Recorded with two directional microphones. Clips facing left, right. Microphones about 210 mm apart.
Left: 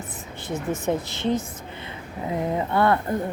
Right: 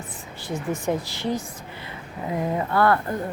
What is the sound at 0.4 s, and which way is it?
Speech, 20° left (ahead or behind).